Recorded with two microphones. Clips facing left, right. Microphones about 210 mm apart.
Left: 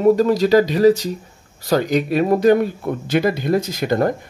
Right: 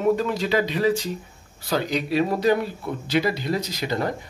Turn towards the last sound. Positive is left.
turn(degrees=50)  # may be behind; listen again after turning